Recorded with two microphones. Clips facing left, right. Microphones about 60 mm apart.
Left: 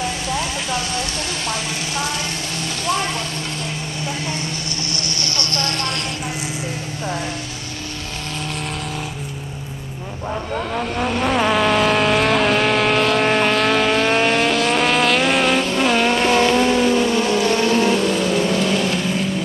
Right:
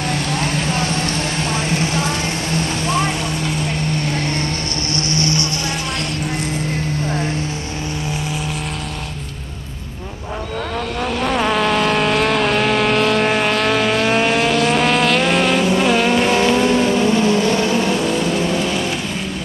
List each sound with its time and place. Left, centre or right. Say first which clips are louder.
0.3 s vehicle: right 3 dB; right
5.1 s vehicle: right 5 dB; right
11.0 s vehicle: even; centre